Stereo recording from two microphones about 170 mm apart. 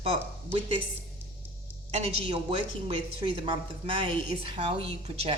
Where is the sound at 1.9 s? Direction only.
35° right (ahead or behind).